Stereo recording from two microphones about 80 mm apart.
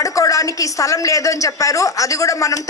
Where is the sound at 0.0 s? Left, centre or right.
Left.